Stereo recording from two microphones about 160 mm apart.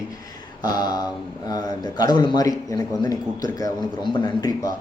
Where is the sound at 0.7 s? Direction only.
25° left (ahead or behind).